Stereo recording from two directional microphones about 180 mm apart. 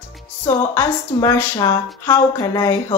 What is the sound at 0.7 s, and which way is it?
A woman's voice, 15° left (ahead or behind).